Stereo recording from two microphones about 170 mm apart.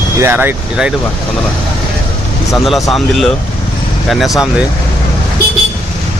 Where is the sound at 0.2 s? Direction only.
10° right (ahead or behind).